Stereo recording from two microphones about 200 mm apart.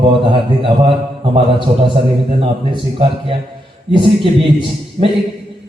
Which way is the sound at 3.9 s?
25° right (ahead or behind).